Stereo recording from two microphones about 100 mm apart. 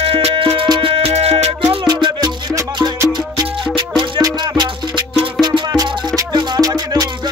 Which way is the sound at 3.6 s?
55° right (ahead or behind).